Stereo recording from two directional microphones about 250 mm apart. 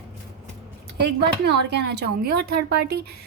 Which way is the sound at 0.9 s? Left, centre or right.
Right.